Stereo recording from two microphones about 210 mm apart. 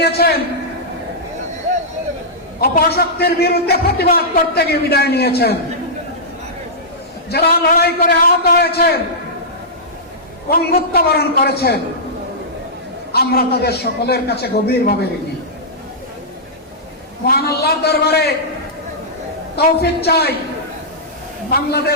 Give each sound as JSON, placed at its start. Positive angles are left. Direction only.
{"t": 0.0, "sound": "a man's voice", "side_deg": 50}
{"t": 2.6, "sound": "a man's voice", "side_deg": 45}
{"t": 7.3, "sound": "a man's voice", "side_deg": 50}
{"t": 10.5, "sound": "a man's voice", "side_deg": 45}
{"t": 13.1, "sound": "a man's voice", "side_deg": 50}
{"t": 17.2, "sound": "a man's voice", "side_deg": 50}
{"t": 19.5, "sound": "a man's voice", "side_deg": 50}
{"t": 21.5, "sound": "a man's voice", "side_deg": 50}